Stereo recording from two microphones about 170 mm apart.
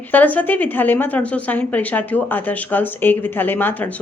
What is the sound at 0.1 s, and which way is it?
Speech, 10° left (ahead or behind).